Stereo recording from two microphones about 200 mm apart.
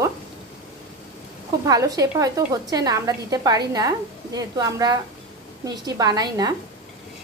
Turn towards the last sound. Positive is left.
turn(degrees=-20)  # may be behind; listen again after turning